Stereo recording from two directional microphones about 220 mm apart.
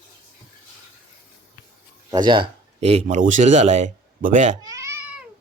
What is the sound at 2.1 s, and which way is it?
Speech, 20° right (ahead or behind).